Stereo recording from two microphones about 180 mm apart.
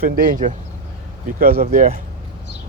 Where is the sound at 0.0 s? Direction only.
50° right (ahead or behind).